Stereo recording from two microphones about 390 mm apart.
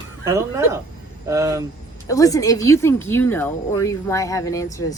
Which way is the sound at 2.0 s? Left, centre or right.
Centre.